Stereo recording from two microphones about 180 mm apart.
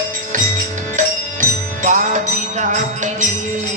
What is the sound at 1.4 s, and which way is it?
Music, 45° right (ahead or behind).